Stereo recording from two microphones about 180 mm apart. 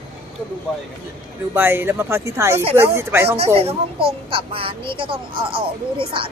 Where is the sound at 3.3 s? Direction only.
35° right (ahead or behind).